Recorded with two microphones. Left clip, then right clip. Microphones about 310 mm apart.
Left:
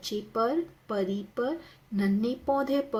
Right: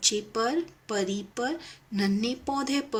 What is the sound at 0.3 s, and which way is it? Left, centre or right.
Speech, centre.